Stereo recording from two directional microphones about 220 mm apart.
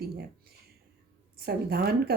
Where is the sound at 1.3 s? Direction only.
45° right (ahead or behind).